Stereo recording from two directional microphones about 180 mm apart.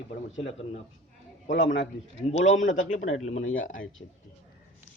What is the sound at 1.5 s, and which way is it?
Speech, 90° left.